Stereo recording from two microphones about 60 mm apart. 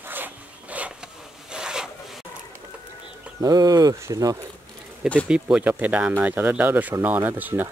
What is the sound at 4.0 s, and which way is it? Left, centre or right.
Speech, right.